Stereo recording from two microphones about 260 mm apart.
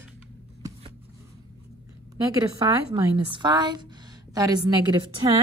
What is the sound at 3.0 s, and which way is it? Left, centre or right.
A woman's voice, centre.